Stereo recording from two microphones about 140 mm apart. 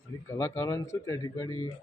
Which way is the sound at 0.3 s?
20° left (ahead or behind).